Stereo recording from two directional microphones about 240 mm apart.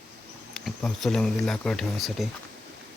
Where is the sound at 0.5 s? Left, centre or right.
Centre.